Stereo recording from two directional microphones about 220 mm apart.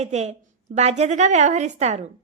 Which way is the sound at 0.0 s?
30° right (ahead or behind).